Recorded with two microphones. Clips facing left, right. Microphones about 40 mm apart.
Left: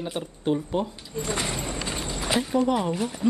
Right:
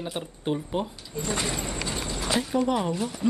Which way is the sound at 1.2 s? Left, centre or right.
Centre.